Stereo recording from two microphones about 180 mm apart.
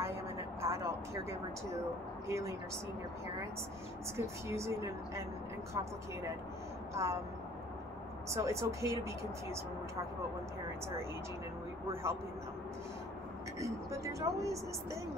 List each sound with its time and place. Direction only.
0.0 s vehicle: 15° right (ahead or behind)
2.2 s speech: 15° right (ahead or behind)
4.2 s speech: 15° right (ahead or behind)
6.9 s speech: 15° right (ahead or behind)
8.3 s speech: 15° right (ahead or behind)
11.9 s speech: 15° right (ahead or behind)
13.6 s speech: 15° right (ahead or behind)